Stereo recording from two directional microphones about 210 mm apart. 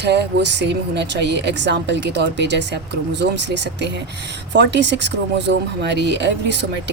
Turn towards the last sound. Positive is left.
turn(degrees=-55)  # may be behind; listen again after turning